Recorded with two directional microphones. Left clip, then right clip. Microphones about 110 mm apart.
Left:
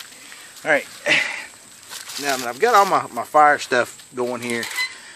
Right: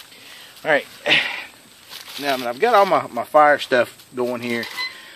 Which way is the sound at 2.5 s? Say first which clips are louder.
Even; 45° right (ahead or behind).